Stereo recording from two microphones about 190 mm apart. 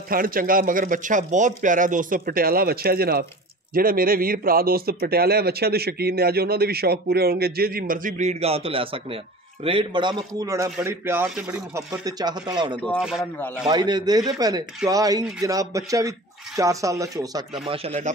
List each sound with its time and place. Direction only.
0.1 s a man's voice: 50° right (ahead or behind); by 11.6 s 5° right (ahead or behind)
11.7 s a man's voice: 20° right (ahead or behind)
12.7 s speech: 10° left (ahead or behind)
13.0 s speech: 5° right (ahead or behind)
13.7 s a man's voice: 20° right (ahead or behind)
17.8 s speech: 35° right (ahead or behind)